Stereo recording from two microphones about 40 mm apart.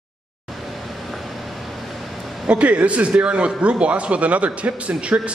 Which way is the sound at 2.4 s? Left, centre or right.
Right.